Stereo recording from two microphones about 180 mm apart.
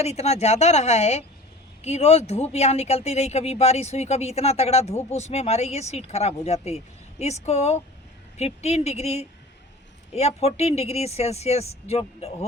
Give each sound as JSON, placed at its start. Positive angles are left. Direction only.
{"t": 0.0, "sound": "speech", "side_deg": 35}